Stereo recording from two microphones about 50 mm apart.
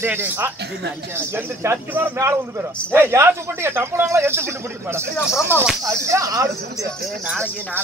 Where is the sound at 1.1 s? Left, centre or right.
Right.